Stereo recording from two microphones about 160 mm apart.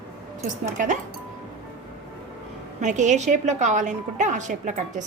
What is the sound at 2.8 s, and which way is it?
A woman's voice, 50° right (ahead or behind).